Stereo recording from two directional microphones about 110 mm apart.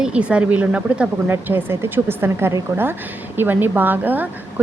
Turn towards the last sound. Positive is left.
turn(degrees=-15)  # may be behind; listen again after turning